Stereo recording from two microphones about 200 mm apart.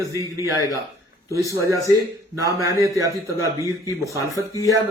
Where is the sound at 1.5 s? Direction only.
15° right (ahead or behind).